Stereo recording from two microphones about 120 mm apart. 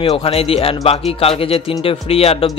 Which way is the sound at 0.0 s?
55° left (ahead or behind).